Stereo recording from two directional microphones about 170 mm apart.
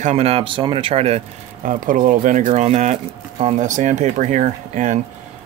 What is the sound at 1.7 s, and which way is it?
Speech, 50° right (ahead or behind).